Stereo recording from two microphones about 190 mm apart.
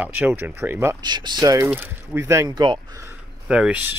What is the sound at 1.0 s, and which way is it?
Speech, 25° right (ahead or behind).